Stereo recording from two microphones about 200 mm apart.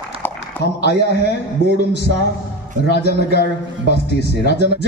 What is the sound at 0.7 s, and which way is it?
Speech, 55° left (ahead or behind).